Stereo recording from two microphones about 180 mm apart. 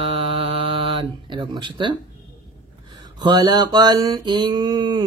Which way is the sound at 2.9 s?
25° right (ahead or behind).